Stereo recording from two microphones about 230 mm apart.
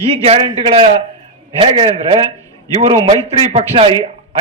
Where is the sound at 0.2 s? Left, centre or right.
Right.